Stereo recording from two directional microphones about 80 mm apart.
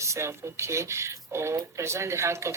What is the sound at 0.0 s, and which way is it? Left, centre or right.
Speech, right.